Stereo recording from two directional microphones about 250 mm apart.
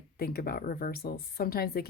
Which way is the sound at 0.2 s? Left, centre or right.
Left.